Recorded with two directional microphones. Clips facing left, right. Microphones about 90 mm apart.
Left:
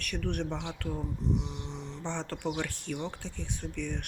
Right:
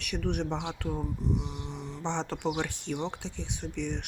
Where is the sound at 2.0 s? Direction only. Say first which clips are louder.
Right 4 dB; 20° right (ahead or behind).